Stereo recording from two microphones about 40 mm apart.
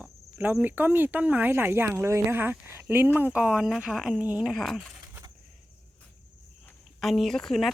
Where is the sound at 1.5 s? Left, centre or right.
Right.